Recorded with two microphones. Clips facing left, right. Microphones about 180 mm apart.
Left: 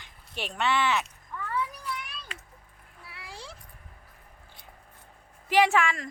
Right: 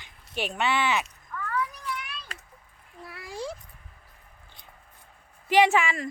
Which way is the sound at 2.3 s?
40° right (ahead or behind).